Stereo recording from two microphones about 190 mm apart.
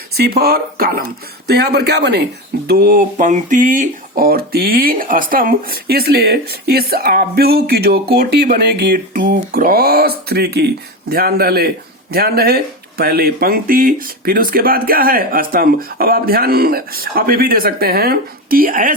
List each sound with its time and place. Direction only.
0.1 s speech: 55° right (ahead or behind)